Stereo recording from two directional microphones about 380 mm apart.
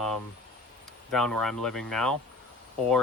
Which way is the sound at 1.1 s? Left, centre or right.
Centre.